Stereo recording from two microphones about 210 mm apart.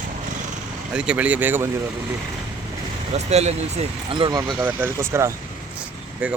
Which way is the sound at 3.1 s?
30° right (ahead or behind).